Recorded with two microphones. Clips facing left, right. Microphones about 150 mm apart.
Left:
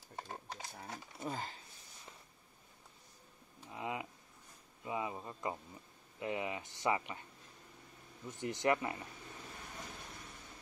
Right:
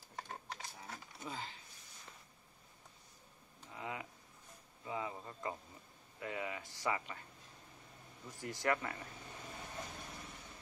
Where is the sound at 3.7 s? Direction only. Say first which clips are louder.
Left 4 dB; 20° left (ahead or behind).